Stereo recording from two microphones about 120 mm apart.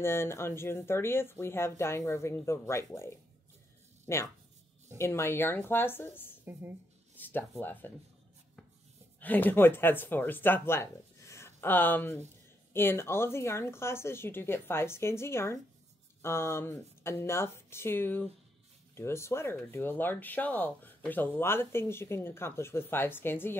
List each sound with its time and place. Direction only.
0.0 s speech: 20° left (ahead or behind)
6.5 s speech: 20° right (ahead or behind)
7.2 s speech: 15° left (ahead or behind)
9.2 s speech: 15° left (ahead or behind)